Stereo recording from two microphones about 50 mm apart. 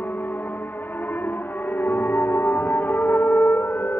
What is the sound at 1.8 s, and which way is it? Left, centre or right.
Music, left.